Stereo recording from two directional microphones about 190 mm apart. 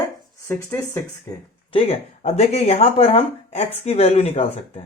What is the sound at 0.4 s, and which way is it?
Speech, 10° left (ahead or behind).